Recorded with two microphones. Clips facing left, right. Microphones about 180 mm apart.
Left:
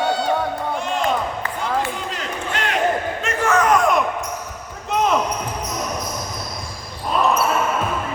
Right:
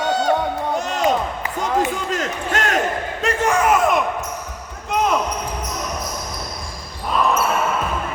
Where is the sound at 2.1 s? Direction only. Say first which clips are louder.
Right 4 dB; 45° right (ahead or behind).